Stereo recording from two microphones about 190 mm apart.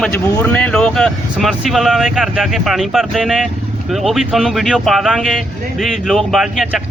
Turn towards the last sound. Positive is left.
turn(degrees=0)  # may be behind; listen again after turning